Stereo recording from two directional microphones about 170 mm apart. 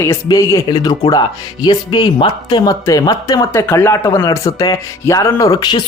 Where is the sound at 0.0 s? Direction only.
20° left (ahead or behind).